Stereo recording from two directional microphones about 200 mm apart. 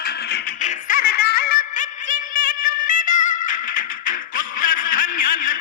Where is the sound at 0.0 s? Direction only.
55° left (ahead or behind).